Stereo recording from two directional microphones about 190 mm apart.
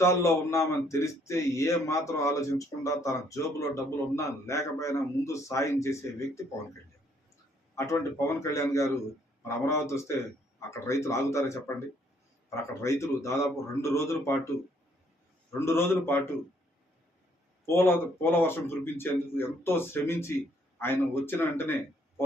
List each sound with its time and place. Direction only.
0.0 s speech: 15° left (ahead or behind)
7.8 s speech: 15° left (ahead or behind)
12.8 s speech: 15° left (ahead or behind)
15.5 s speech: 15° left (ahead or behind)
17.7 s speech: 10° left (ahead or behind)